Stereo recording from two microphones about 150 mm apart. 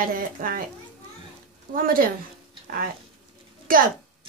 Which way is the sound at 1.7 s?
70° right (ahead or behind).